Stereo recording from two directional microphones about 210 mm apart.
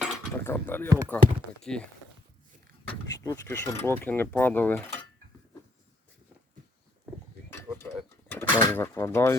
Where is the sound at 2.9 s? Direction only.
15° left (ahead or behind).